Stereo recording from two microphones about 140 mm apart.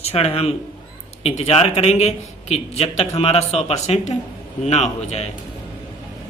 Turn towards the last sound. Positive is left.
turn(degrees=50)  # may be behind; listen again after turning